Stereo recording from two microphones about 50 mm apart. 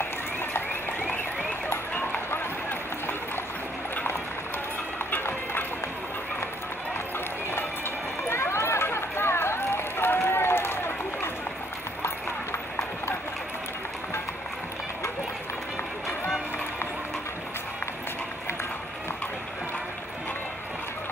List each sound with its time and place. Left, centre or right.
1.7 s run: left
5.1 s a sound: left
8.3 s run: left